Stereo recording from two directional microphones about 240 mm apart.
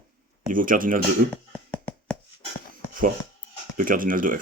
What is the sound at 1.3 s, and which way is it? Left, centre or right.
Hands, centre.